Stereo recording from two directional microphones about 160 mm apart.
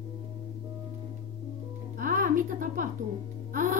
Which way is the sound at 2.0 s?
55° right (ahead or behind).